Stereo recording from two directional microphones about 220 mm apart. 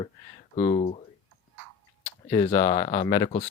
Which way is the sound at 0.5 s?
35° left (ahead or behind).